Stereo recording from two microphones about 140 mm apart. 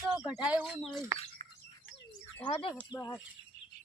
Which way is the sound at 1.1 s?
20° right (ahead or behind).